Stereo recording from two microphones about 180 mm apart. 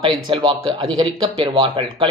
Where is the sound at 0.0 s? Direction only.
30° right (ahead or behind).